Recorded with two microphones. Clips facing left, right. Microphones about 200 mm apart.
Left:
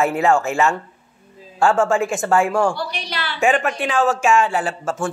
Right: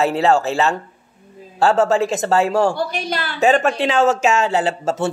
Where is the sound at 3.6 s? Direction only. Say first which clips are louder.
Right 3 dB; 25° right (ahead or behind).